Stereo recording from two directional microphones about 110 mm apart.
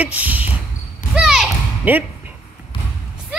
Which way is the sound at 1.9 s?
15° right (ahead or behind).